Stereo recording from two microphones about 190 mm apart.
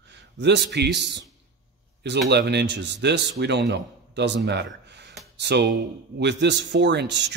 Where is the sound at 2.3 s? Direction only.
60° right (ahead or behind).